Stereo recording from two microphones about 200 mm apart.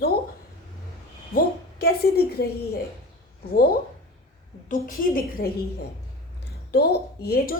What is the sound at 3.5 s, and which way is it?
Speech, 50° left (ahead or behind).